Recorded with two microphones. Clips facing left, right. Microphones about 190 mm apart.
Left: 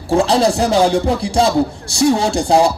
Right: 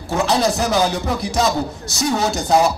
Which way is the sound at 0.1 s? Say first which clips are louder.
Left 5 dB; 30° left (ahead or behind).